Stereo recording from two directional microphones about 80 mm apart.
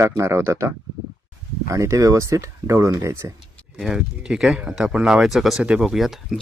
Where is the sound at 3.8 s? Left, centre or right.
Centre.